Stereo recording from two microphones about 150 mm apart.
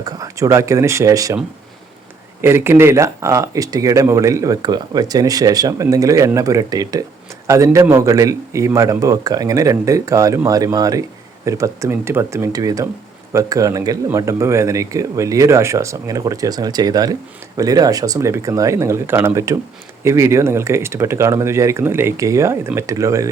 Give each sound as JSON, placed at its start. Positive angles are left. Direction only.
{"t": 0.0, "sound": "speech", "side_deg": -20}
{"t": 2.4, "sound": "speech", "side_deg": -15}